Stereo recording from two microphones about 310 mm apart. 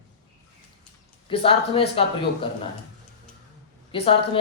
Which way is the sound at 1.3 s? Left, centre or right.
Centre.